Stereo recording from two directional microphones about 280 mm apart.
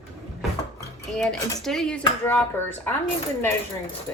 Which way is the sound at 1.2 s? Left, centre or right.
Centre.